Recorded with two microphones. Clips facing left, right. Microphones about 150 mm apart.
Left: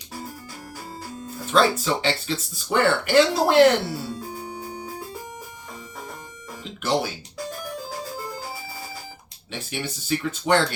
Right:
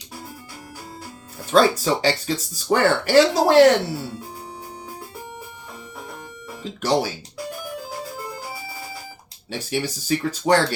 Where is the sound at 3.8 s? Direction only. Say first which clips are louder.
Right 2 dB; 10° right (ahead or behind).